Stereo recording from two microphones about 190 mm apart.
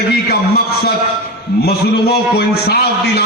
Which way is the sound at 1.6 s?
55° left (ahead or behind).